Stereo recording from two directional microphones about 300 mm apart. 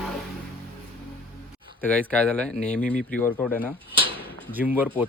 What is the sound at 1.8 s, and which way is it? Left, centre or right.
Speech, centre.